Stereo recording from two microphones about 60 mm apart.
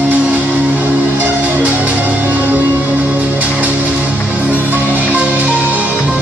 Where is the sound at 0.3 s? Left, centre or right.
Right.